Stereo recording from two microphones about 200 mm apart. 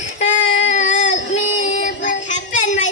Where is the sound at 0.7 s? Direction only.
35° left (ahead or behind).